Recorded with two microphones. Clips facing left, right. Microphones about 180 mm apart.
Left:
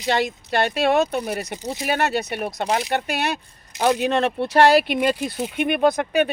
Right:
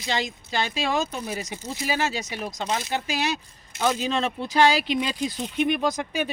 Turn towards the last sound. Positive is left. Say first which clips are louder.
# left 8 dB
turn(degrees=60)  # may be behind; listen again after turning